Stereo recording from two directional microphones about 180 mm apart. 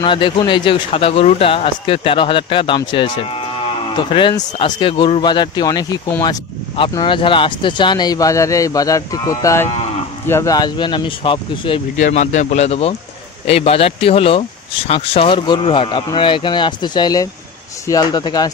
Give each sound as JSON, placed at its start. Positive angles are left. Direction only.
{"t": 0.0, "sound": "speech", "side_deg": 25}
{"t": 12.0, "sound": "a man's voice", "side_deg": 40}